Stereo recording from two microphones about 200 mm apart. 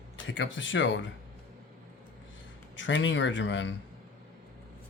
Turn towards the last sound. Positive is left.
turn(degrees=65)  # may be behind; listen again after turning